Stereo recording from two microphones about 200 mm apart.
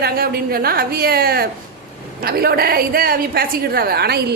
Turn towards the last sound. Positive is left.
turn(degrees=-55)  # may be behind; listen again after turning